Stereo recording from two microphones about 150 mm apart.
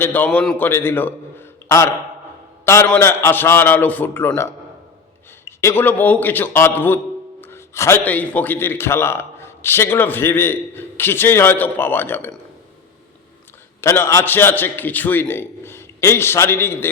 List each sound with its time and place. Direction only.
0.0 s a man's voice: 10° left (ahead or behind)
5.5 s a man's voice: 15° left (ahead or behind)
13.8 s a man's voice: 20° left (ahead or behind)